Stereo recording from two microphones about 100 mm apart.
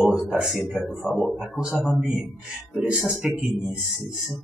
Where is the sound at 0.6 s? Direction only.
5° left (ahead or behind).